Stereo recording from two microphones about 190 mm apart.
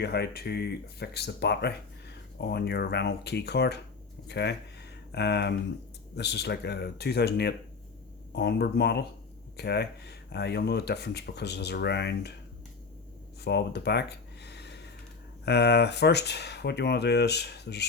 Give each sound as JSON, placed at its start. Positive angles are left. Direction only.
{"t": 0.0, "sound": "speech", "side_deg": 60}
{"t": 13.4, "sound": "a sound", "side_deg": 60}
{"t": 15.4, "sound": "speech", "side_deg": 60}